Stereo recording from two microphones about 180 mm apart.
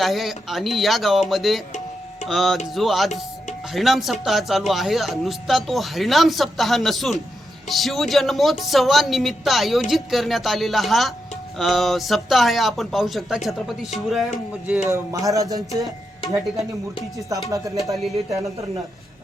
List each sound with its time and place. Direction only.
0.0 s speech: centre (ahead or behind)
14.8 s speech: 15° right (ahead or behind)
16.2 s music: 25° left (ahead or behind)